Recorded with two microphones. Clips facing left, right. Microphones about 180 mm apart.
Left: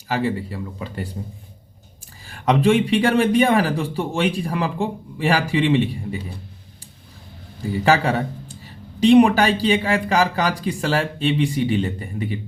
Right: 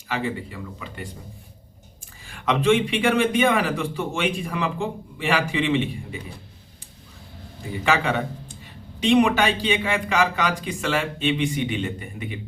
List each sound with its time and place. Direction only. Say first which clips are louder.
0.1 s a man's voice: left 5 dB; 35° left (ahead or behind)
2.2 s a man's voice: left 3 dB; 40° left (ahead or behind)
7.9 s a man's voice: left 4 dB; 35° left (ahead or behind)